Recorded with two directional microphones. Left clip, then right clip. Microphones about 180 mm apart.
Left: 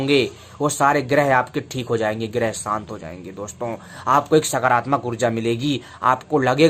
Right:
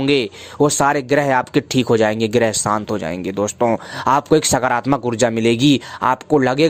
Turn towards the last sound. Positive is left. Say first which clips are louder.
# right 2 dB
turn(degrees=-50)  # may be behind; listen again after turning